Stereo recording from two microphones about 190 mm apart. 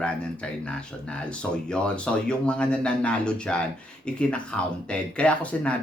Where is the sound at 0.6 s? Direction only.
5° left (ahead or behind).